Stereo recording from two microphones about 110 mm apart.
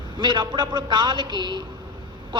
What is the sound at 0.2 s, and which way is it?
A man's voice, 45° right (ahead or behind).